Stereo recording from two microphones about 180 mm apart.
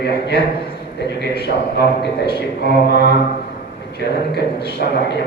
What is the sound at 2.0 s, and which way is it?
A man's voice, 65° left (ahead or behind).